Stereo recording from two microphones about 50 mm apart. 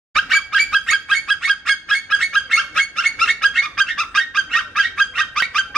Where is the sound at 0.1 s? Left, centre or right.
Centre.